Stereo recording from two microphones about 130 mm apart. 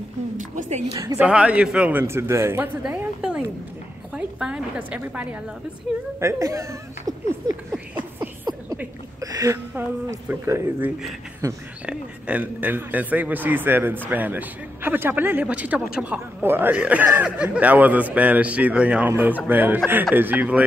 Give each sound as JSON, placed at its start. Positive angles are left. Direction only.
{"t": 0.6, "sound": "a woman's voice", "side_deg": -60}
{"t": 0.9, "sound": "a woman's voice", "side_deg": -20}
{"t": 1.2, "sound": "a man's voice", "side_deg": -10}
{"t": 8.5, "sound": "a sound", "side_deg": -30}
{"t": 9.2, "sound": "a woman's voice", "side_deg": -25}
{"t": 11.8, "sound": "a man's voice", "side_deg": -10}